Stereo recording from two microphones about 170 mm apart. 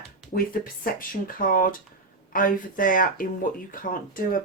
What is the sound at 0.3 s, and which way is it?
Speech, 60° left (ahead or behind).